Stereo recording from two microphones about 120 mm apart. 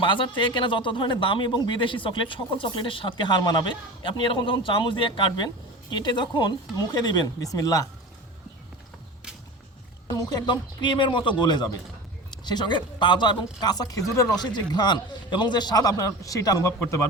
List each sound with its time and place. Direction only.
0.0 s speech: 45° left (ahead or behind)
10.1 s speech: 35° left (ahead or behind)